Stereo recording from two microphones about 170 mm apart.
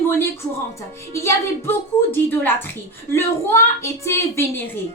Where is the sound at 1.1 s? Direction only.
15° left (ahead or behind).